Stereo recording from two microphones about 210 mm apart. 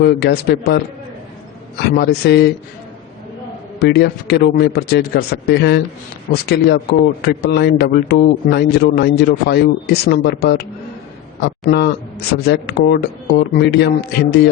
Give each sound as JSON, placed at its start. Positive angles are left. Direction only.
{"t": 0.0, "sound": "a man's voice", "side_deg": 50}
{"t": 2.0, "sound": "a man's voice", "side_deg": 50}
{"t": 3.8, "sound": "a man's voice", "side_deg": 50}